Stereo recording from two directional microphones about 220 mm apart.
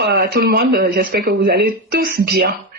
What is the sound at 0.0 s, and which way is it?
A man's voice, 45° right (ahead or behind).